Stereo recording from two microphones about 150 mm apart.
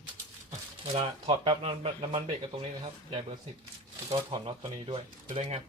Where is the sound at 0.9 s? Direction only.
40° right (ahead or behind).